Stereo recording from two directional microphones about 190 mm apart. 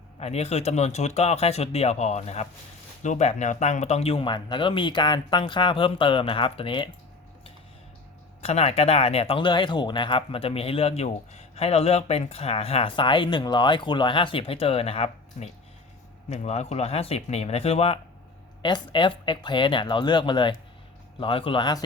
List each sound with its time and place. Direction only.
0.2 s speech: 35° left (ahead or behind)
8.4 s speech: 35° left (ahead or behind)